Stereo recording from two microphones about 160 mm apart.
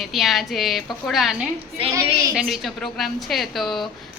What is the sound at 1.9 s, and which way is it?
Speech, 20° right (ahead or behind).